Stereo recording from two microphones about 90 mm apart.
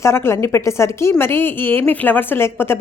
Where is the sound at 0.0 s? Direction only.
30° left (ahead or behind).